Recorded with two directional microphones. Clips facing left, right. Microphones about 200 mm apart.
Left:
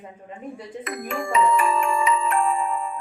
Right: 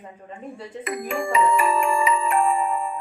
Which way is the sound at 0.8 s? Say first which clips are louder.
Right 3 dB; 10° right (ahead or behind).